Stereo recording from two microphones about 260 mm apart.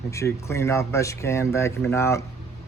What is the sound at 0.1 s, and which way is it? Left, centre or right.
Speech, centre.